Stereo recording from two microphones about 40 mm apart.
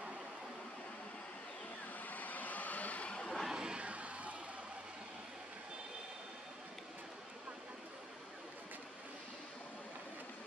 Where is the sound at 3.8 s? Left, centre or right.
Right.